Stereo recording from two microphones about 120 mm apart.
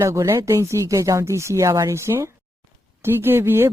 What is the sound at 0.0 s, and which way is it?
Speech, 25° right (ahead or behind).